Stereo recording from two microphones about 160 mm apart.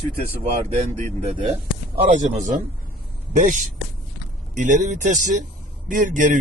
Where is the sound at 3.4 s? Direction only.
55° right (ahead or behind).